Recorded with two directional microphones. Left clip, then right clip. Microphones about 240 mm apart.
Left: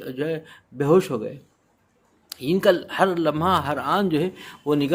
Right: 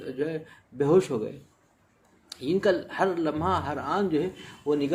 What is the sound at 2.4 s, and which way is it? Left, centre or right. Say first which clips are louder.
Speech: left 5 dB; left.